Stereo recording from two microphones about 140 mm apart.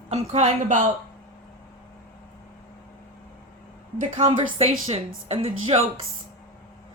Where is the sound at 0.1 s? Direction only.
50° right (ahead or behind).